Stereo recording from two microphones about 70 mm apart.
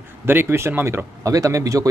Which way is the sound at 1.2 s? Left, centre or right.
Right.